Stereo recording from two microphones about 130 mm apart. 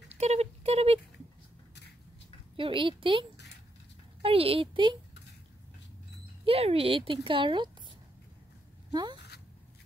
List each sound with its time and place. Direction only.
0.1 s a sound: 55° right (ahead or behind)
2.5 s a woman's voice: 40° right (ahead or behind)
6.4 s a woman's voice: 50° right (ahead or behind)
8.9 s speech: 35° right (ahead or behind)